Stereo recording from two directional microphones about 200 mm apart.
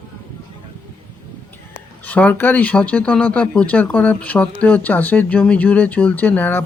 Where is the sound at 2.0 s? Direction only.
10° left (ahead or behind).